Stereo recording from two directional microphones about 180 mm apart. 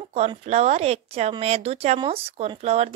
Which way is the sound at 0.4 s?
35° right (ahead or behind).